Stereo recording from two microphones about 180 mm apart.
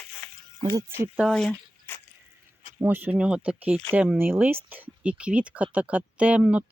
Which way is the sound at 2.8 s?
10° right (ahead or behind).